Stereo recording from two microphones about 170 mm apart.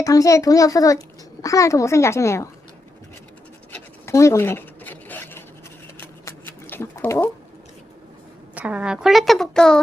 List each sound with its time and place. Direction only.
0.0 s a child's voice: 20° left (ahead or behind)
3.7 s zipper: 15° left (ahead or behind)
6.0 s a sound: 10° left (ahead or behind)
8.5 s a woman's voice: 10° right (ahead or behind)